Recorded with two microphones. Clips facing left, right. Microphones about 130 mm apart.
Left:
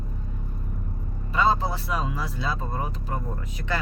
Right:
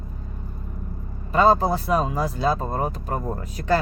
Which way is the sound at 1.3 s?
45° right (ahead or behind).